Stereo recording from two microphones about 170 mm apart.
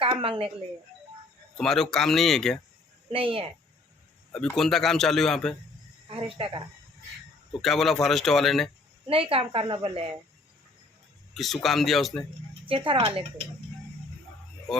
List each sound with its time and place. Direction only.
0.0 s speech: 30° right (ahead or behind)
1.5 s a man's voice: 5° left (ahead or behind)
3.1 s a woman's voice: 30° right (ahead or behind)
4.3 s a man's voice: 5° left (ahead or behind)
6.1 s a woman's voice: 30° right (ahead or behind)
7.6 s a man's voice: centre (ahead or behind)
9.0 s a woman's voice: 35° right (ahead or behind)
11.3 s a man's voice: centre (ahead or behind)
12.6 s a woman's voice: 30° right (ahead or behind)